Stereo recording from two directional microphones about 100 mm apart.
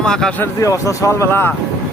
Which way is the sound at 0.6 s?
30° left (ahead or behind).